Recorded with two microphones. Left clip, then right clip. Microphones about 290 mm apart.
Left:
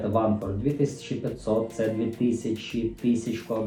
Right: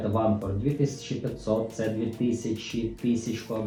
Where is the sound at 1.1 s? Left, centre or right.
Right.